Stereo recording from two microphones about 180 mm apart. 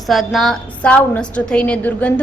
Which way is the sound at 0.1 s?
Centre (ahead or behind).